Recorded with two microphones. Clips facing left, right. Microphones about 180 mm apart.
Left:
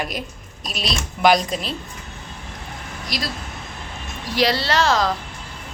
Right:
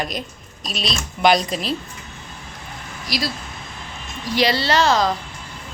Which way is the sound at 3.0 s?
5° right (ahead or behind).